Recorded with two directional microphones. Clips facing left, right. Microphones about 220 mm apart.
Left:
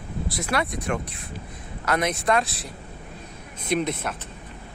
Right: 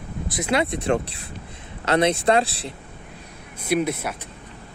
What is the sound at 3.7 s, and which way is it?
Speech, 10° right (ahead or behind).